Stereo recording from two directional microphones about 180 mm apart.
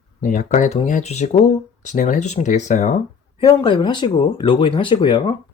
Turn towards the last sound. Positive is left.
turn(degrees=25)  # may be behind; listen again after turning